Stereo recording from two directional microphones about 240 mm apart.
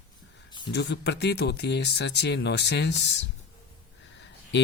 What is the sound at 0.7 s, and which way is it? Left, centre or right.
Speech, left.